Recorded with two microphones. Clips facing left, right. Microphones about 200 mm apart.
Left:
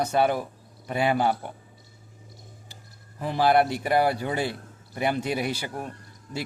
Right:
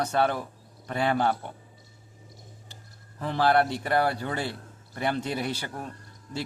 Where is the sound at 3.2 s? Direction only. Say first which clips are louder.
Left 2 dB; 10° left (ahead or behind).